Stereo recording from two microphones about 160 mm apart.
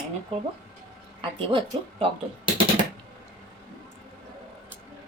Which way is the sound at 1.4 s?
35° right (ahead or behind).